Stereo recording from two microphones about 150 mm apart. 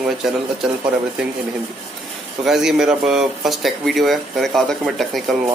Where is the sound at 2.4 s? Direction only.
Centre (ahead or behind).